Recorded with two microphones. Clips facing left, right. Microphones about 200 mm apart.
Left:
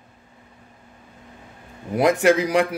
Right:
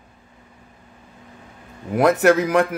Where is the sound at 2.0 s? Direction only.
10° left (ahead or behind).